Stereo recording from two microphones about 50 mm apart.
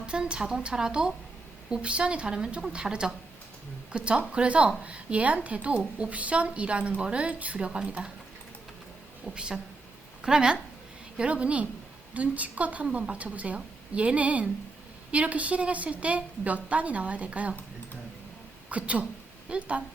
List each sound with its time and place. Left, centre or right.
0.0 s speech: centre
9.3 s a woman's voice: centre
18.7 s speech: right